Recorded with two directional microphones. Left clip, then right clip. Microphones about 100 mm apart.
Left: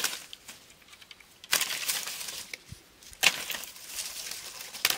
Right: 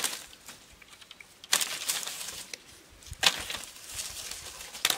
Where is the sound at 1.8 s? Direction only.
Centre (ahead or behind).